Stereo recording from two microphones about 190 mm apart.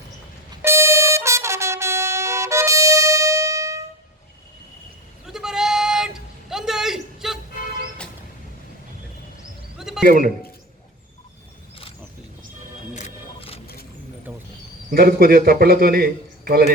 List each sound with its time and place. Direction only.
0.6 s trumpet: 15° right (ahead or behind)
5.2 s bleat: centre (ahead or behind)
9.7 s a sound: 5° right (ahead or behind)
10.0 s a man's voice: 45° right (ahead or behind)
12.9 s music: 40° left (ahead or behind)
14.3 s bird: 5° right (ahead or behind)
14.8 s a man's voice: 50° right (ahead or behind)